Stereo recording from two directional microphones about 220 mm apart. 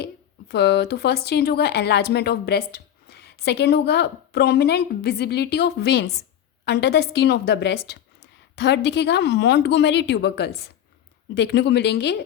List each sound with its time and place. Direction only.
0.0 s speech: 50° left (ahead or behind)